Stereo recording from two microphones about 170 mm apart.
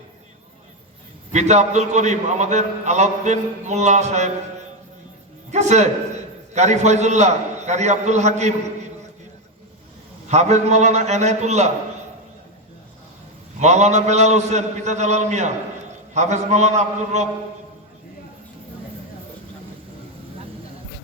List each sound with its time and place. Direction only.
1.3 s a man's voice: 40° right (ahead or behind)
5.5 s a man's voice: 40° right (ahead or behind)
10.2 s a man's voice: 40° right (ahead or behind)
13.6 s a man's voice: 40° right (ahead or behind)